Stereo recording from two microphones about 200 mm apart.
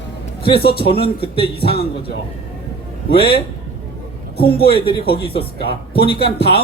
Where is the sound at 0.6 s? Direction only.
50° left (ahead or behind).